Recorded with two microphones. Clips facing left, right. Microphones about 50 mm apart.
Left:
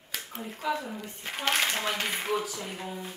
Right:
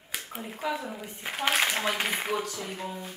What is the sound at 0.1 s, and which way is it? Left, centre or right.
Speech, centre.